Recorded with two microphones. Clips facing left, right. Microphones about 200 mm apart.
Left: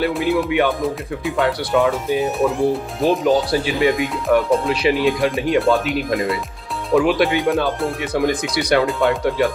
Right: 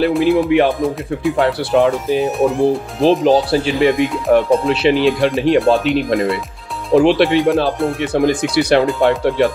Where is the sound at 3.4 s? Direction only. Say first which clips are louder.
Right 4 dB; 25° right (ahead or behind).